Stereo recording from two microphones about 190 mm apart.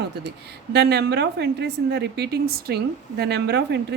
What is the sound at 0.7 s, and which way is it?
A woman's voice, 60° right (ahead or behind).